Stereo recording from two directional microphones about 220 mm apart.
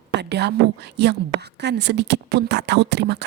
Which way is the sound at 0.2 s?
50° right (ahead or behind).